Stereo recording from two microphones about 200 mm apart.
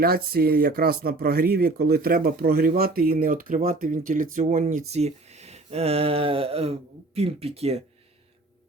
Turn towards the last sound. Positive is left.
turn(degrees=-30)  # may be behind; listen again after turning